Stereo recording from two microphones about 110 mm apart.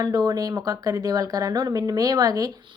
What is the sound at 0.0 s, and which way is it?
Speech, 40° right (ahead or behind).